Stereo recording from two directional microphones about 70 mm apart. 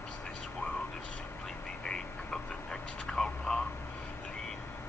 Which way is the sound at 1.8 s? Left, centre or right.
Centre.